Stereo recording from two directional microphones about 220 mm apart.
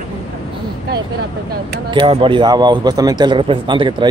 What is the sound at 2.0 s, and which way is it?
A man's voice, 25° right (ahead or behind).